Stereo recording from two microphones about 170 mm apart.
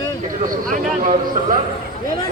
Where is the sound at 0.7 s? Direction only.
50° right (ahead or behind).